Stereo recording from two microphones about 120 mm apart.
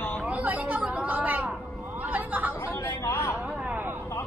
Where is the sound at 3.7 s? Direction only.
15° right (ahead or behind).